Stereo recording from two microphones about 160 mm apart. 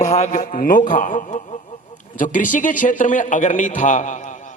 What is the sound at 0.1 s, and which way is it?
A man's voice, 50° left (ahead or behind).